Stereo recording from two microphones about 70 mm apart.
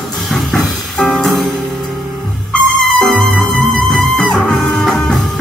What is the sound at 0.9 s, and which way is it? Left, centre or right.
Music, centre.